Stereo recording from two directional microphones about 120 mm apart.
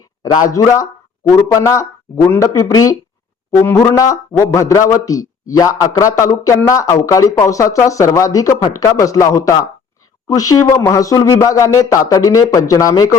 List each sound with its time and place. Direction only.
0.2 s speech: 30° left (ahead or behind)